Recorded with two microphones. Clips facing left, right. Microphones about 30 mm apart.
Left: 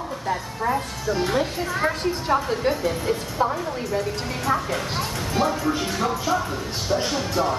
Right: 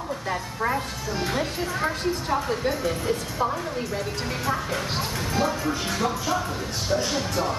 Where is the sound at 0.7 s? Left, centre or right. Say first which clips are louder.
Left 4 dB; centre.